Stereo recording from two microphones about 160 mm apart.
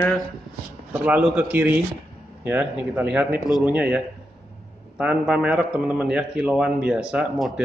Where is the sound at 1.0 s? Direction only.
10° right (ahead or behind).